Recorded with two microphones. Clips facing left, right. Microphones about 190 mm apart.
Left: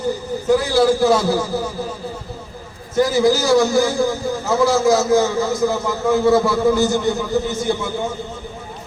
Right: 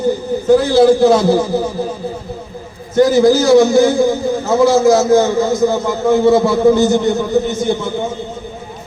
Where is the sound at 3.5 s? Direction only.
25° right (ahead or behind).